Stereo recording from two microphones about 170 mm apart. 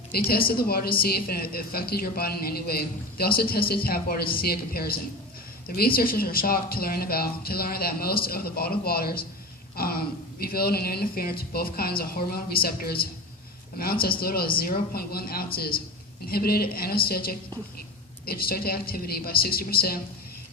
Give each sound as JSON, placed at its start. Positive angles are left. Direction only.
{"t": 0.1, "sound": "a woman's voice", "side_deg": 60}